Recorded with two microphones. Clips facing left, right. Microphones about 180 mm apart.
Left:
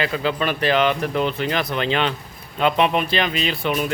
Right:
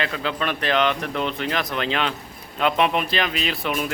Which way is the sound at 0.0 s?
5° left (ahead or behind).